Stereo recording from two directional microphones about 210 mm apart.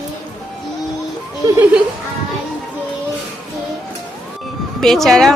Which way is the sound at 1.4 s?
10° right (ahead or behind).